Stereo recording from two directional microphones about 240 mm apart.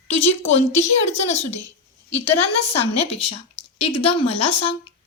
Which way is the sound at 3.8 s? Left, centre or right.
Left.